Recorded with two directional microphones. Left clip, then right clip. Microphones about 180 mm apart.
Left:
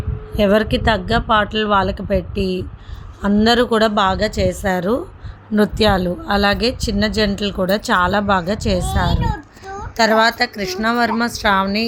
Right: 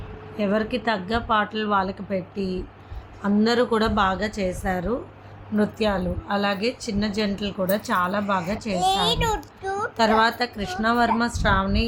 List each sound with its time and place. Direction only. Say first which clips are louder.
0.3 s a woman's voice: left 9 dB; 45° left (ahead or behind)
8.8 s a child's voice: right 1 dB; 40° right (ahead or behind)
10.0 s speech: left 6 dB; 20° left (ahead or behind)